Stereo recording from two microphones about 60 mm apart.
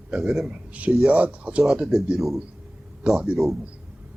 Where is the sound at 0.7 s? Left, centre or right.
Right.